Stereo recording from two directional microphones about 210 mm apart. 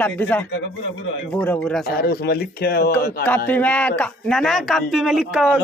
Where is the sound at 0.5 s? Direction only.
65° left (ahead or behind).